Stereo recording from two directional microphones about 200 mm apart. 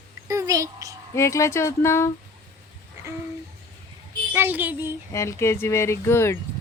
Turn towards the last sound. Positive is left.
turn(degrees=10)  # may be behind; listen again after turning